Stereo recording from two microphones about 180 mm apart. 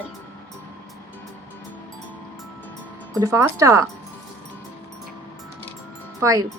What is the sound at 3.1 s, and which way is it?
Speech, 15° right (ahead or behind).